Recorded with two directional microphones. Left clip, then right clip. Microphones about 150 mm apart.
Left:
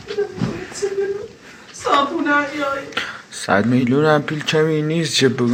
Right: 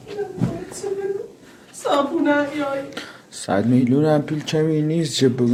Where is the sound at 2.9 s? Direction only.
30° right (ahead or behind).